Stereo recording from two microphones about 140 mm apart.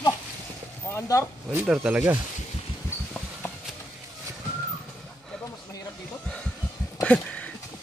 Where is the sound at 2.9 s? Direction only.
15° left (ahead or behind).